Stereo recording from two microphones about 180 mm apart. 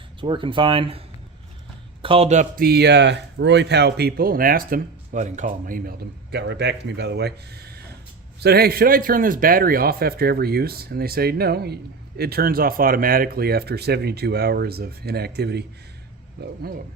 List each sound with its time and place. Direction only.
0.2 s speech: 30° right (ahead or behind)
2.6 s a man's voice: 65° right (ahead or behind)
6.3 s a man's voice: 70° right (ahead or behind)